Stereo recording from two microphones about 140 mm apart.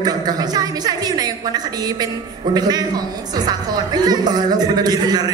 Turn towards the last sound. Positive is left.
turn(degrees=-30)  # may be behind; listen again after turning